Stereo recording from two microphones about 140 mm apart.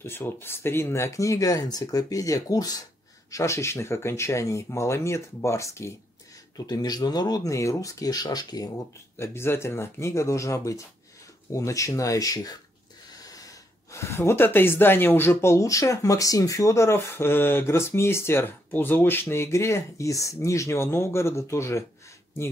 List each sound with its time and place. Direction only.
0.0 s speech: 15° left (ahead or behind)
13.2 s snort: 25° left (ahead or behind)
13.9 s speech: 20° left (ahead or behind)